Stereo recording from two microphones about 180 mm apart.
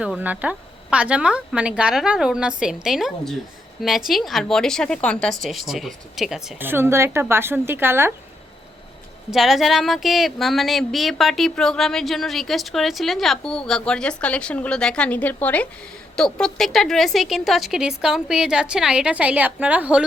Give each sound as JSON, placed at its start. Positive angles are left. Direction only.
{"t": 0.0, "sound": "speech", "side_deg": -5}
{"t": 9.3, "sound": "speech", "side_deg": 0}